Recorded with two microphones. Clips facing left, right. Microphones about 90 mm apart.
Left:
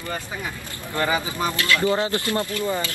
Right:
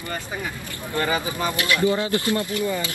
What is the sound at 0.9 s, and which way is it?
Speech, 25° left (ahead or behind).